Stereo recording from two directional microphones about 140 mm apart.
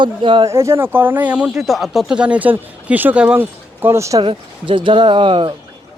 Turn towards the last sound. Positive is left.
turn(degrees=-35)  # may be behind; listen again after turning